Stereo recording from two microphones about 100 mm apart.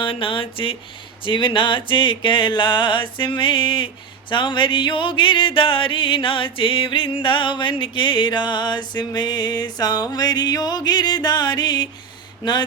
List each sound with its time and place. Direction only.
0.0 s speech: 60° left (ahead or behind)
1.2 s music: 55° left (ahead or behind)